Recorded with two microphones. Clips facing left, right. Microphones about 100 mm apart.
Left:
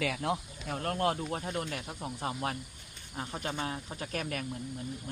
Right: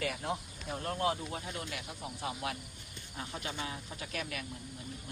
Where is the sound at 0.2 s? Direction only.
90° left.